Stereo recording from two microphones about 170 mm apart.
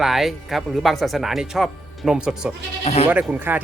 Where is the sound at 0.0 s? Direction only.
Centre (ahead or behind).